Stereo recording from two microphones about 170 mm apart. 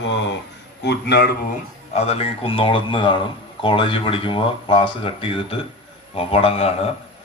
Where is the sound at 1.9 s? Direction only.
35° left (ahead or behind).